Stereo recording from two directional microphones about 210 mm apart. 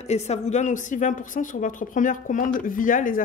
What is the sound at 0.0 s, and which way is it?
A woman's voice, 30° left (ahead or behind).